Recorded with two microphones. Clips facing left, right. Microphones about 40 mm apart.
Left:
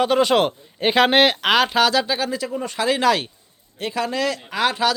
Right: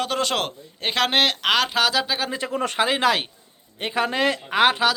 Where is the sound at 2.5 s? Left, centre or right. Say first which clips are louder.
Right 2 dB; right.